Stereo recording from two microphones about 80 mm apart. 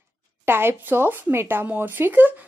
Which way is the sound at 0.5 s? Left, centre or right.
Right.